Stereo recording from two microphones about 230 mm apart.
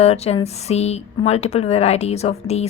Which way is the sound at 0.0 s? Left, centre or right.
Left.